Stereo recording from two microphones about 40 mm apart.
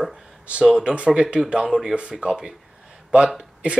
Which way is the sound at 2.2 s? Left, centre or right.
Centre.